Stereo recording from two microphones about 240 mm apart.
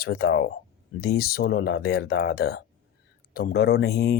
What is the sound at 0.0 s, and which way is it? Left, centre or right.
Speech, left.